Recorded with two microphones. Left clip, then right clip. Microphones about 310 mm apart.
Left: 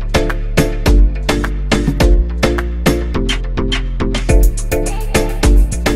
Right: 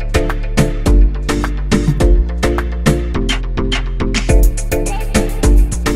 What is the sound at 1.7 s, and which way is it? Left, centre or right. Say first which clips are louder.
Music: left 1 dB; centre.